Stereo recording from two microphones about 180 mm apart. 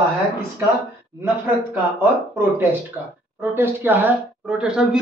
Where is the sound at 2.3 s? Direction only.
15° right (ahead or behind).